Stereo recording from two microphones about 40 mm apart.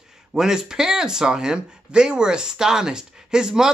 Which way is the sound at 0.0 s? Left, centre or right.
Centre.